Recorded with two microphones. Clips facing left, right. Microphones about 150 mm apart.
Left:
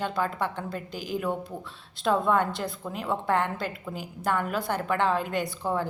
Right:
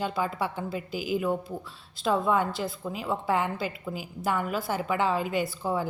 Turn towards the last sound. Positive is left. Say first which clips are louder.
# even
turn(degrees=-5)  # may be behind; listen again after turning